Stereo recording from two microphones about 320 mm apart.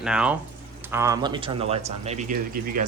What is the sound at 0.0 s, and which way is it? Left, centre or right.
Speech, centre.